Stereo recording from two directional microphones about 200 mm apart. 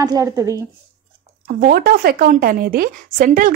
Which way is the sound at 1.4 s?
50° right (ahead or behind).